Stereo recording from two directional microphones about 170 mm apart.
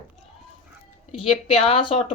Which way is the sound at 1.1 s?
30° left (ahead or behind).